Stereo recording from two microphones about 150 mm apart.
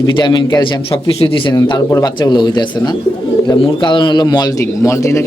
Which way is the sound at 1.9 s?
25° left (ahead or behind).